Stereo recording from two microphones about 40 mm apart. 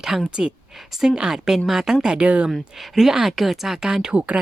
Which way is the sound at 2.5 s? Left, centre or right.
Centre.